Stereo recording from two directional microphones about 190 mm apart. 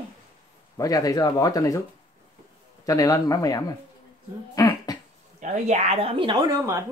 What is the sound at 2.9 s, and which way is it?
Speech, 20° left (ahead or behind).